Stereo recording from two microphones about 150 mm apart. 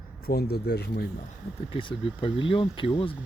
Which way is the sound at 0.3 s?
90° left.